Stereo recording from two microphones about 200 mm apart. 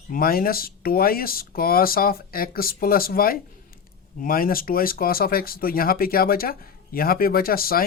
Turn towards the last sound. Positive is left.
turn(degrees=50)  # may be behind; listen again after turning